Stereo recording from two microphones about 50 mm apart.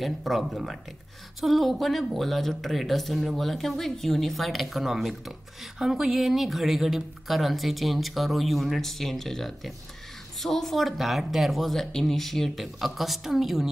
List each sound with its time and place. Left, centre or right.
0.0 s speech: centre